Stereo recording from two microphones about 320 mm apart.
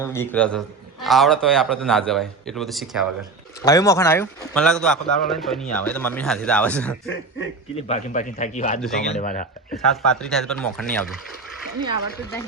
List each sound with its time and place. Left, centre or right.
0.0 s a man's voice: centre
3.6 s a man's voice: centre
7.9 s a man's voice: left
8.8 s a man's voice: centre
9.0 s a man's voice: left
9.7 s a man's voice: centre